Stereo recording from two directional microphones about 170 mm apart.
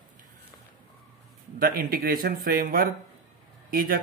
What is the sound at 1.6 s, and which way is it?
Speech, 60° right (ahead or behind).